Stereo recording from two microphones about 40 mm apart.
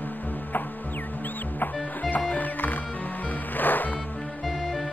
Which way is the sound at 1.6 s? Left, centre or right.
Left.